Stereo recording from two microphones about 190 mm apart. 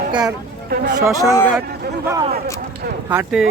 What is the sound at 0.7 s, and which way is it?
Speech, 50° right (ahead or behind).